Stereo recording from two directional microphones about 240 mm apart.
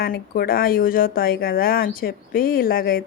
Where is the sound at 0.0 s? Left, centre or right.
Left.